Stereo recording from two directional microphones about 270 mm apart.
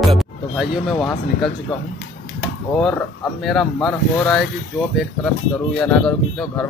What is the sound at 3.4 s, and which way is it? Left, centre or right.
Speech, centre.